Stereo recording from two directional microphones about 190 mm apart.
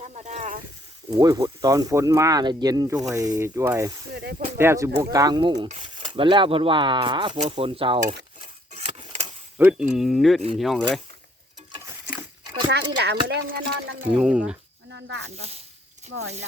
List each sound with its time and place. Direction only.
0.0 s a sound: 35° right (ahead or behind)
1.1 s speech: 20° right (ahead or behind)
4.1 s speech: 55° right (ahead or behind)
4.5 s speech: 15° right (ahead or behind)
8.7 s keys jangling: 30° right (ahead or behind)
9.6 s speech: 10° right (ahead or behind)
11.8 s patter: 10° right (ahead or behind)
13.0 s speech: 60° right (ahead or behind)
14.1 s speech: 5° right (ahead or behind)
14.9 s speech: 70° right (ahead or behind)
15.4 s speech: 35° right (ahead or behind)